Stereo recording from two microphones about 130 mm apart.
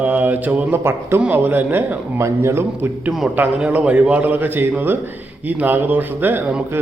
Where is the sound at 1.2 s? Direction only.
15° right (ahead or behind).